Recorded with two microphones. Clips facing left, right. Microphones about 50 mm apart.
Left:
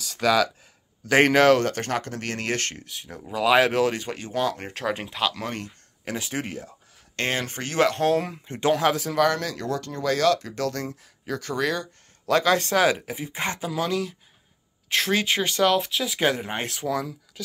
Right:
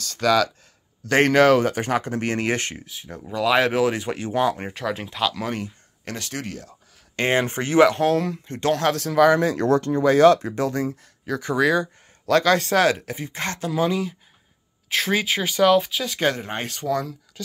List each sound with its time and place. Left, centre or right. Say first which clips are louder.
0.0 s speech: right 2 dB; centre
2.1 s speech: right 5 dB; right
2.8 s speech: right 1 dB; centre; by 4.6 s right
4.6 s speech: right 3 dB; centre
4.9 s speech: right 2 dB; centre
6.0 s speech: left 1 dB; centre
7.2 s speech: right 6 dB; right
7.9 s speech: right 2 dB; centre
8.2 s speech: right 2 dB; centre
9.3 s speech: right 9 dB; right
10.9 s speech: right 4 dB; centre
12.3 s speech: right 3 dB; centre
13.7 s speech: right 6 dB; centre